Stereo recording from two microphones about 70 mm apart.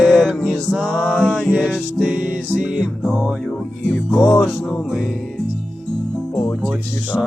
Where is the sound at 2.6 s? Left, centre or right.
Centre.